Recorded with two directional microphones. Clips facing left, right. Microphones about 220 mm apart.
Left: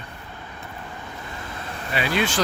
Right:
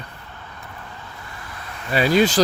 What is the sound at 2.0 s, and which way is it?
Speech, 40° right (ahead or behind).